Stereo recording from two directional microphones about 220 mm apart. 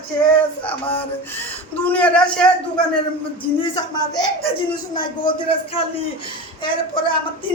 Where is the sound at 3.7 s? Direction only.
20° left (ahead or behind).